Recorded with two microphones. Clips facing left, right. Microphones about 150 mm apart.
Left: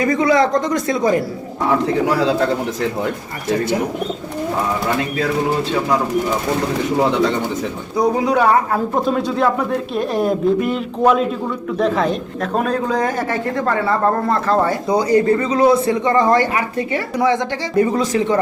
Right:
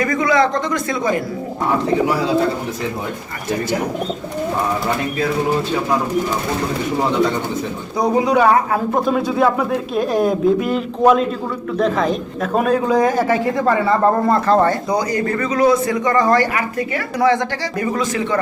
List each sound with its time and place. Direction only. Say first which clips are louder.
0.0 s speech: left 1 dB; 30° left (ahead or behind)
7.9 s speech: right 1 dB; centre (ahead or behind)
14.8 s a man's voice: left 5 dB; 25° left (ahead or behind)
17.7 s speech: left 5 dB; 35° left (ahead or behind)